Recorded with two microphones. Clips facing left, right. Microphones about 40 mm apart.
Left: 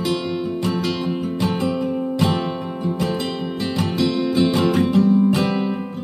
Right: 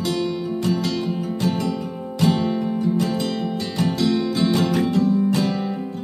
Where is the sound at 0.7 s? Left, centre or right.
Left.